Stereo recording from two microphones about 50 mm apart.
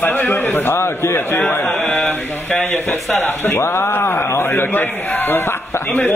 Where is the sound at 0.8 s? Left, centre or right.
Left.